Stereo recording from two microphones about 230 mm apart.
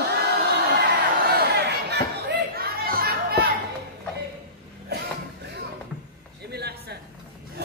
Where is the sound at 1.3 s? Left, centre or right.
Right.